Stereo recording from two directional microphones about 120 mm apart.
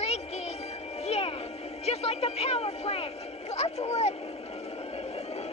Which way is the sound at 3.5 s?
65° left (ahead or behind).